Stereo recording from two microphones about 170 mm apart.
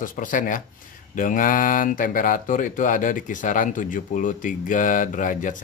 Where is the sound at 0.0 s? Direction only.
50° left (ahead or behind).